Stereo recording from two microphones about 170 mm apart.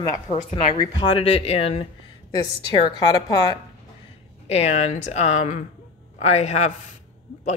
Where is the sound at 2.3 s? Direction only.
25° left (ahead or behind).